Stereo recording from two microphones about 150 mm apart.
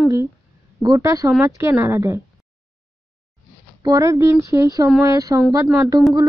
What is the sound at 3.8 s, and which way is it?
Speech, 20° right (ahead or behind).